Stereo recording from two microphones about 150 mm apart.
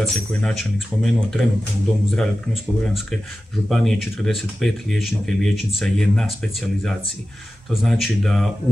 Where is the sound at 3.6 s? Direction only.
Centre (ahead or behind).